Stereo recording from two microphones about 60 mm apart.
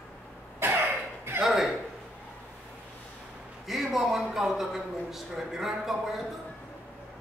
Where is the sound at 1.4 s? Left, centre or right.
Centre.